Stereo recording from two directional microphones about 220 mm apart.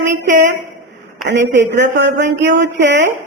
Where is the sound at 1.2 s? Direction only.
50° right (ahead or behind).